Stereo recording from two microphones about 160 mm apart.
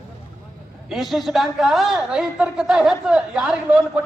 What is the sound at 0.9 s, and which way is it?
A woman's voice, centre (ahead or behind).